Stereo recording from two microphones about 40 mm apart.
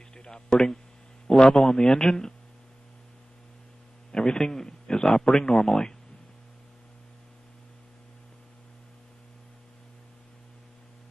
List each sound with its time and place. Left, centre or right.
0.1 s speech: centre
4.1 s speech: centre